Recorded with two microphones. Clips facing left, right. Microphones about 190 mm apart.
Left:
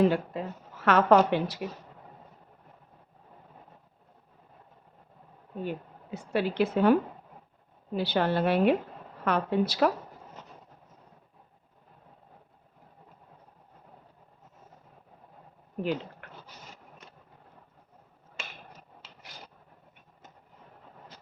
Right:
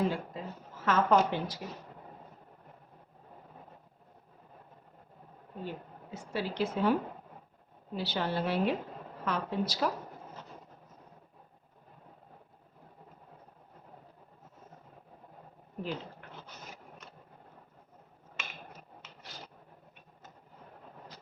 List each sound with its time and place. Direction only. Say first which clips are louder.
0.0 s a woman's voice: left 7 dB; 70° left (ahead or behind)
5.6 s a woman's voice: left 5 dB; 65° left (ahead or behind)
7.9 s a woman's voice: left 6 dB; 60° left (ahead or behind)
15.8 s speech: left 7 dB; 70° left (ahead or behind)